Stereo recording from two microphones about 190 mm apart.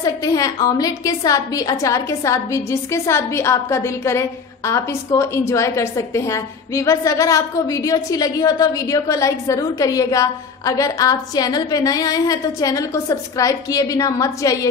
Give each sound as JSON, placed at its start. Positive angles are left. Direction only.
{"t": 0.0, "sound": "a woman's voice", "side_deg": 20}